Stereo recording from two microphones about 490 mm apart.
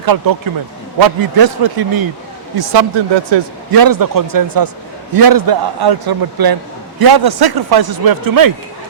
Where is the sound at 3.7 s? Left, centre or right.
Right.